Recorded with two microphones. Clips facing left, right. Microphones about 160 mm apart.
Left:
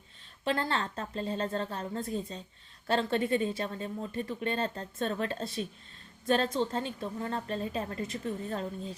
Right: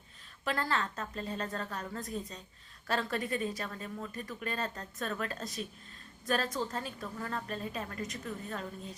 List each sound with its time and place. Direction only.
0.4 s speech: 25° left (ahead or behind)